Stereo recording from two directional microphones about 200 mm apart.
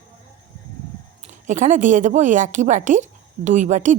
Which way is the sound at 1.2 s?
40° right (ahead or behind).